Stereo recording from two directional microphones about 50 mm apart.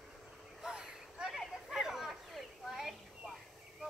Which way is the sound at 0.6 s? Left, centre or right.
Centre.